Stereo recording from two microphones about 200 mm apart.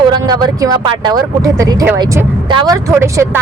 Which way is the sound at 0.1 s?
20° right (ahead or behind).